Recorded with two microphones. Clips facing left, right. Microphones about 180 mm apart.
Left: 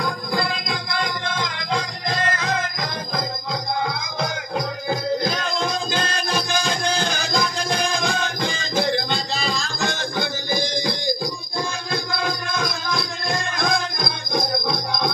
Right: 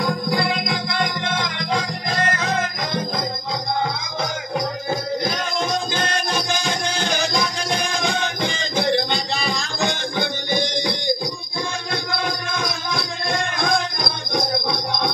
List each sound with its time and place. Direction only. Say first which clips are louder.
0.5 s music: right 4 dB; 60° right (ahead or behind)
6.1 s music: even; 60° right (ahead or behind)
13.6 s music: right 1 dB; 55° right (ahead or behind)